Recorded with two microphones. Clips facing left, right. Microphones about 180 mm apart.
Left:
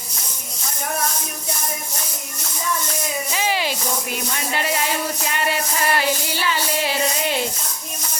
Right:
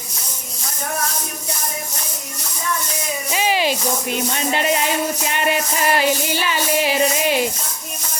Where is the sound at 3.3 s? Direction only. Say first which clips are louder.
Right 6 dB; 15° right (ahead or behind).